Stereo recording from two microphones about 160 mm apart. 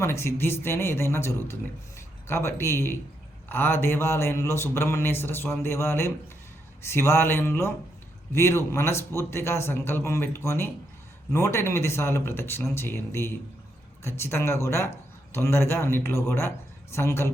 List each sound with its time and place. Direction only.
0.0 s speech: 15° left (ahead or behind)